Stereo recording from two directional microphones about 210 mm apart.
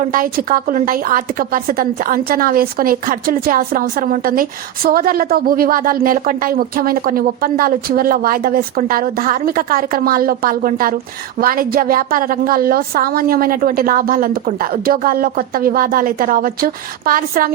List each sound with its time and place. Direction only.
0.0 s a woman's voice: 40° right (ahead or behind)